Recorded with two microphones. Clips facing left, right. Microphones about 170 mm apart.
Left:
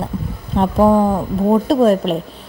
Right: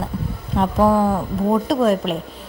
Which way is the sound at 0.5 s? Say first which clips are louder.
Left 3 dB; 25° left (ahead or behind).